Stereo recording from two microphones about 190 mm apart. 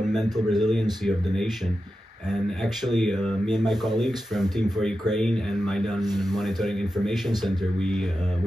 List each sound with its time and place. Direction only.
0.0 s a sound: 5° right (ahead or behind)
0.5 s speech: centre (ahead or behind)
2.6 s speech: centre (ahead or behind)
6.0 s speech: 20° right (ahead or behind)
6.3 s speech: centre (ahead or behind)